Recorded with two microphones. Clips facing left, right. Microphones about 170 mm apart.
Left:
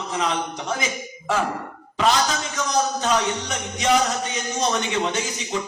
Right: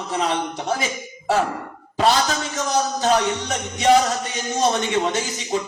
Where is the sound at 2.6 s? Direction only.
35° right (ahead or behind).